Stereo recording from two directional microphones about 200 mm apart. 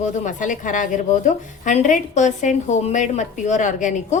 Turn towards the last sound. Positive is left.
turn(degrees=40)  # may be behind; listen again after turning